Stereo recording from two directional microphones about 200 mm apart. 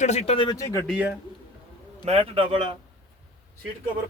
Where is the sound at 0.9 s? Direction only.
5° right (ahead or behind).